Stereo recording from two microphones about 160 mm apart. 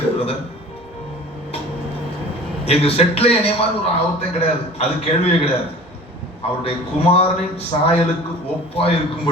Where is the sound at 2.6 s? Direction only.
40° left (ahead or behind).